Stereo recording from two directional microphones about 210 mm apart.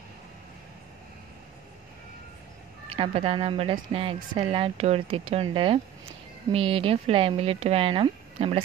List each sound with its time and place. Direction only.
2.9 s a woman's voice: 25° right (ahead or behind)